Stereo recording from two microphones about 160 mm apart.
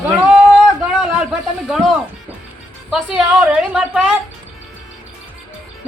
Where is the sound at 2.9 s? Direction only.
5° right (ahead or behind).